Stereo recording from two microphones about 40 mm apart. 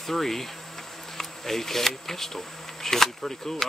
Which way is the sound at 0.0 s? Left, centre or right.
Centre.